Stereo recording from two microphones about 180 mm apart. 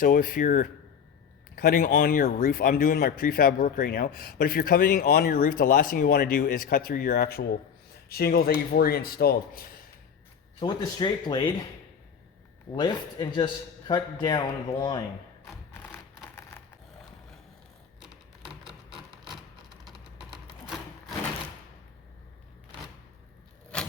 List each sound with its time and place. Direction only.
0.0 s speech: 50° left (ahead or behind)
1.5 s a man's voice: 55° left (ahead or behind)
10.6 s a man's voice: 25° left (ahead or behind)
12.7 s a man's voice: 25° left (ahead or behind)
16.3 s crushing: 10° left (ahead or behind)
18.0 s typewriter: 5° right (ahead or behind)
23.7 s vehicle: 5° left (ahead or behind)